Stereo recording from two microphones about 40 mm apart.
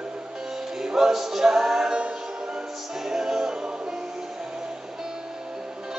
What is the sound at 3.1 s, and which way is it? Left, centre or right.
Music, centre.